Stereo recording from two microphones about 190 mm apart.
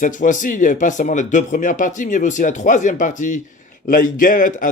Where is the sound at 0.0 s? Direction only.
45° left (ahead or behind).